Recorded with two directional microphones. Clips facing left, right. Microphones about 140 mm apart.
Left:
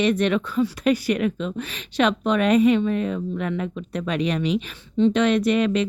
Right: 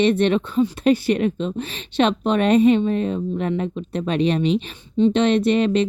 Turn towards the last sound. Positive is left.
turn(degrees=-30)  # may be behind; listen again after turning